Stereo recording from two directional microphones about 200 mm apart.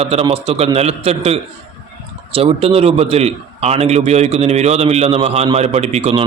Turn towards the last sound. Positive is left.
turn(degrees=-30)  # may be behind; listen again after turning